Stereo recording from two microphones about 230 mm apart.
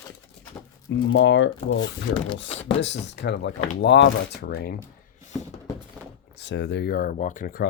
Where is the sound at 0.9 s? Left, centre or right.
Left.